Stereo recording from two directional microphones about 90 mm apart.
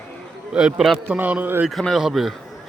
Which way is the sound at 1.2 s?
20° right (ahead or behind).